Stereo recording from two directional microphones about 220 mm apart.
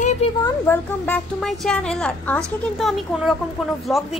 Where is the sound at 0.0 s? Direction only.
30° left (ahead or behind).